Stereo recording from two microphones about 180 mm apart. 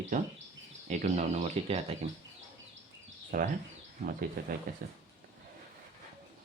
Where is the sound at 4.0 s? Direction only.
40° right (ahead or behind).